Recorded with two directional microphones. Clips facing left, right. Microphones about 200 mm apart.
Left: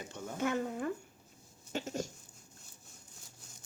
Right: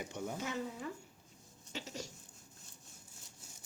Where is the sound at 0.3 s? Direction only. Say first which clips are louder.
Left 12 dB; 55° left (ahead or behind).